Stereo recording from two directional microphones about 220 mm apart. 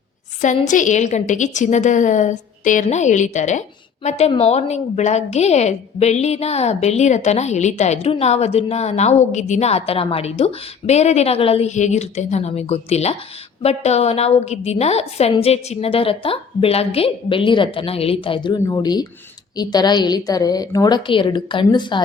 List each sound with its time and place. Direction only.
0.4 s a woman's voice: 35° left (ahead or behind)